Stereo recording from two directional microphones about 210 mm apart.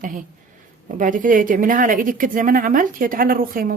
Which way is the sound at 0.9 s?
40° right (ahead or behind).